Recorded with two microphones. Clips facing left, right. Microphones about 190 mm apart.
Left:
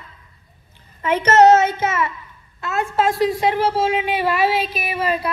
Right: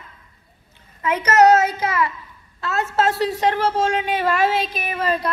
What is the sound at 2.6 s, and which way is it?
A woman's voice, 15° left (ahead or behind).